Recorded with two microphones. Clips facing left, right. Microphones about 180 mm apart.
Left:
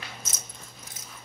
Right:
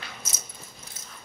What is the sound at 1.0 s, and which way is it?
Dog, 15° left (ahead or behind).